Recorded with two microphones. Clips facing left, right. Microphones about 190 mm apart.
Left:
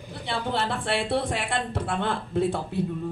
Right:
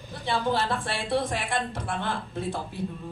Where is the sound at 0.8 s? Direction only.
65° left (ahead or behind).